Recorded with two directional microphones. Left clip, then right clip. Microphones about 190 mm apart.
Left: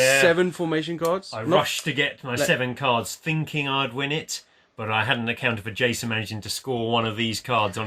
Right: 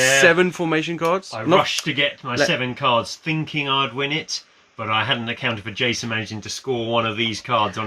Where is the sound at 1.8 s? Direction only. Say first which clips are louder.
Right 4 dB; 25° left (ahead or behind).